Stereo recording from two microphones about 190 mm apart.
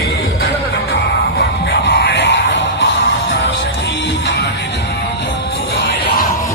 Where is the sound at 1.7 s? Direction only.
60° left (ahead or behind).